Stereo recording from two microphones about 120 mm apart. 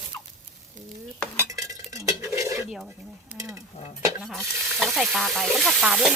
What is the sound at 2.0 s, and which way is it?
Cutlery, 25° right (ahead or behind).